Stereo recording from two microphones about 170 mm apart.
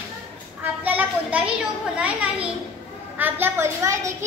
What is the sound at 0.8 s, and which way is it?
Children playing, 10° right (ahead or behind).